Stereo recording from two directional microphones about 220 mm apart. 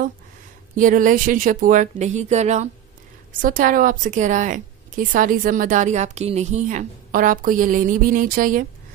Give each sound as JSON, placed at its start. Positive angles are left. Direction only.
{"t": 0.7, "sound": "a woman's voice", "side_deg": -35}